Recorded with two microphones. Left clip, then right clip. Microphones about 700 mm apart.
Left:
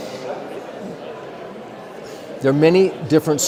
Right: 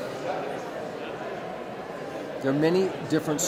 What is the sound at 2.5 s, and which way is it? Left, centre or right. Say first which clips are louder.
Speech: left 10 dB; left.